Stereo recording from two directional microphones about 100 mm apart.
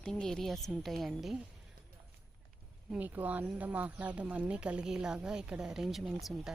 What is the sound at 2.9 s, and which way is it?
Speech, 15° right (ahead or behind).